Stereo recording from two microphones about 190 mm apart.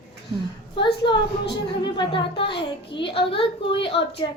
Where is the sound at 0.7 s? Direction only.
25° left (ahead or behind).